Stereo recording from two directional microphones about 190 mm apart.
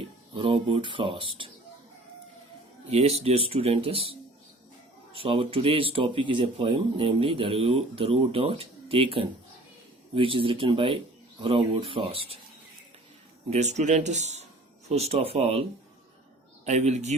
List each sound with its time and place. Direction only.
0.3 s speech: 25° right (ahead or behind)
2.9 s speech: 35° right (ahead or behind)
13.5 s speech: 35° right (ahead or behind)
16.6 s speech: 35° right (ahead or behind)